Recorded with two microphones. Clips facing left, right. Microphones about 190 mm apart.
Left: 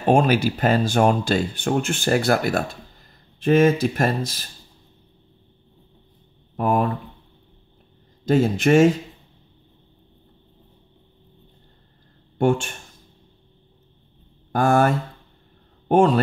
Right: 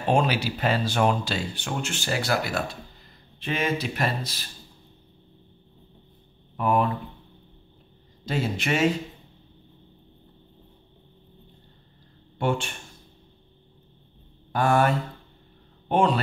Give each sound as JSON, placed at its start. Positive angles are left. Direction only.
{"t": 0.0, "sound": "speech", "side_deg": 50}
{"t": 6.5, "sound": "speech", "side_deg": 40}
{"t": 8.3, "sound": "speech", "side_deg": 45}
{"t": 12.4, "sound": "speech", "side_deg": 45}
{"t": 14.5, "sound": "speech", "side_deg": 45}